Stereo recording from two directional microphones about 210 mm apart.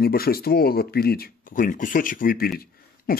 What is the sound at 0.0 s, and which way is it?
Speech, 45° left (ahead or behind).